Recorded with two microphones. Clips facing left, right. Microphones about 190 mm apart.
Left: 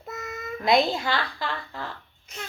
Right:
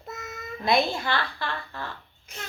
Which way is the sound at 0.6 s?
20° left (ahead or behind).